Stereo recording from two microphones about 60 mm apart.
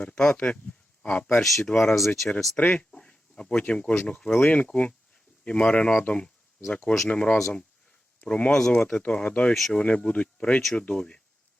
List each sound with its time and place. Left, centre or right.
0.0 s speech: left
1.4 s speech: centre
2.0 s speech: centre
2.6 s speech: centre
8.2 s speech: left